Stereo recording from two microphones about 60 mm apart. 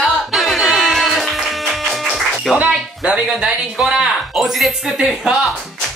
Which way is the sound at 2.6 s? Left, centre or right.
Right.